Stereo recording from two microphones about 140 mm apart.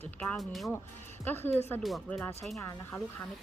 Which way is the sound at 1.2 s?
15° left (ahead or behind).